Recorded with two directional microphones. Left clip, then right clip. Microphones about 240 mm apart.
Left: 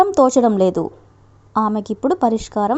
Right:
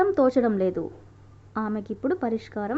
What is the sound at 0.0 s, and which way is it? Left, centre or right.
A woman's voice, left.